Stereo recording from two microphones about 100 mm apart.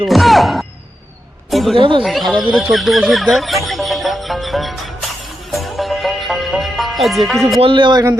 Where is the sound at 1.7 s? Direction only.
60° right (ahead or behind).